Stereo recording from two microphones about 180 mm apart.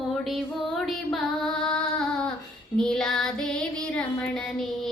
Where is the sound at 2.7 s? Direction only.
5° left (ahead or behind).